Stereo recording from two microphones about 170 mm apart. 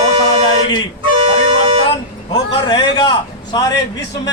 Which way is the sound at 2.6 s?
25° left (ahead or behind).